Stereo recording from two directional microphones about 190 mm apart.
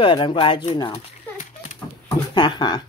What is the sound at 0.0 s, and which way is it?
Speech, 25° left (ahead or behind).